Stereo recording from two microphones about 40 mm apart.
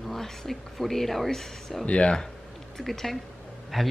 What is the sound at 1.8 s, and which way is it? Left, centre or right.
Speech, left.